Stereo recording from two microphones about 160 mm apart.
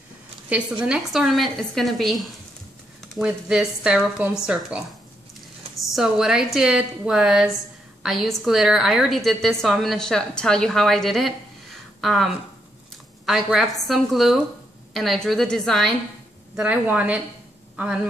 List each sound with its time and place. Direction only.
0.8 s a woman's voice: 5° right (ahead or behind)
5.9 s a woman's voice: 5° right (ahead or behind)